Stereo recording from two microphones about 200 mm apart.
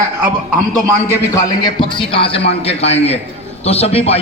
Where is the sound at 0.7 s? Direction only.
10° left (ahead or behind).